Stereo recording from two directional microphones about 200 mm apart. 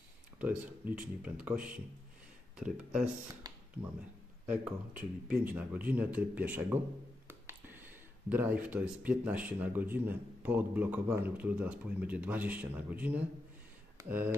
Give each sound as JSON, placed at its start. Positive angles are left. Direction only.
{"t": 0.4, "sound": "speech", "side_deg": -5}
{"t": 3.4, "sound": "a sound", "side_deg": -20}
{"t": 4.5, "sound": "speech", "side_deg": -5}